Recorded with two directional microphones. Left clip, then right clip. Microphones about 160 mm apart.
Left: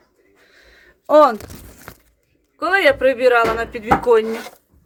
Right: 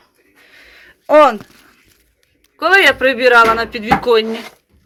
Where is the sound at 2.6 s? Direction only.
15° right (ahead or behind).